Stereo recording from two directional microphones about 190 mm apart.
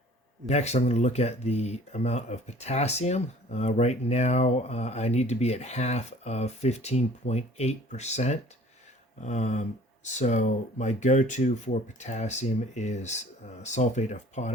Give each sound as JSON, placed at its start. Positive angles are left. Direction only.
{"t": 0.4, "sound": "speech", "side_deg": 35}